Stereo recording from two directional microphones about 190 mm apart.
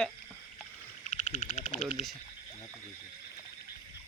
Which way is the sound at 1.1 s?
40° left (ahead or behind).